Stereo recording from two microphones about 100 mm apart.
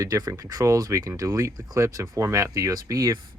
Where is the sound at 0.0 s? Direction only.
35° right (ahead or behind).